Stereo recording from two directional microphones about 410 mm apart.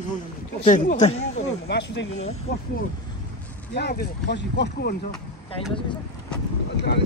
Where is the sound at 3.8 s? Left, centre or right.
Left.